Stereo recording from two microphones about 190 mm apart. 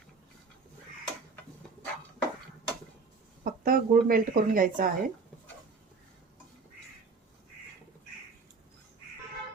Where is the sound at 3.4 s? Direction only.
45° right (ahead or behind).